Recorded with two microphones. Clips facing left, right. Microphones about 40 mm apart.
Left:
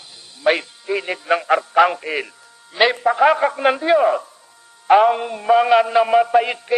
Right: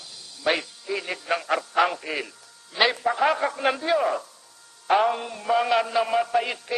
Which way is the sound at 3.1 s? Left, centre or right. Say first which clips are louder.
Left 7 dB; left.